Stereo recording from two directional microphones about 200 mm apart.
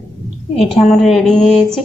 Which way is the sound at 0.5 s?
Centre (ahead or behind).